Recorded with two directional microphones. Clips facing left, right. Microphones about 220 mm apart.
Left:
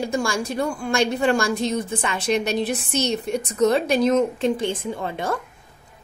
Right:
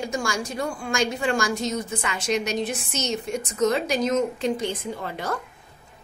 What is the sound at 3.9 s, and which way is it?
Speech, 60° left (ahead or behind).